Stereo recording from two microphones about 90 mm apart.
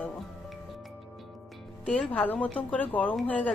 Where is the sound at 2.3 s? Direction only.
15° left (ahead or behind).